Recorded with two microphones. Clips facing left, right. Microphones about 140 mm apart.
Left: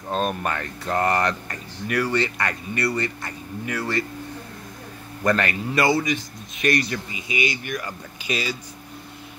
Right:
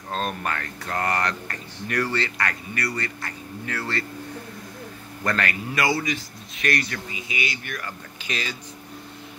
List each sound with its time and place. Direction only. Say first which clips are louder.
0.1 s speech: left 3 dB; 15° left (ahead or behind)
1.9 s a man's voice: left 3 dB; 10° left (ahead or behind)
5.2 s a man's voice: left 4 dB; 20° left (ahead or behind)